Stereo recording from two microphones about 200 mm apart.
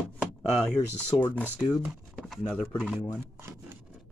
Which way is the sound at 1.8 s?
Centre (ahead or behind).